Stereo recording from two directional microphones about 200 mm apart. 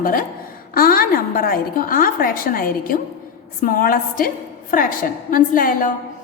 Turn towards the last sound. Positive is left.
turn(degrees=40)  # may be behind; listen again after turning